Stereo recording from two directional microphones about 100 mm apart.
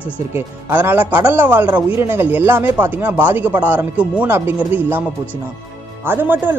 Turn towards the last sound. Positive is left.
turn(degrees=-20)  # may be behind; listen again after turning